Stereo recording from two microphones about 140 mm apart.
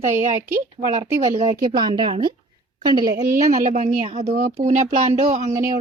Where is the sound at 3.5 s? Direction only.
60° right (ahead or behind).